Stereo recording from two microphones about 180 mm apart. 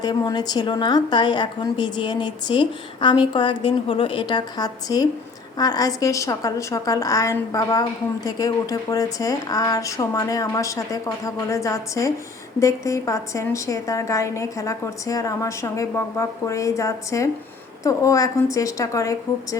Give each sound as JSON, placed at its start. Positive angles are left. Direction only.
{"t": 0.0, "sound": "a woman's voice", "side_deg": 20}